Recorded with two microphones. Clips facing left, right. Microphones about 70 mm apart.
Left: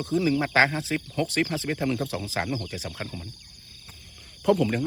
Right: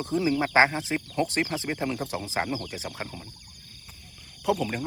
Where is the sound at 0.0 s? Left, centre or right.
Right.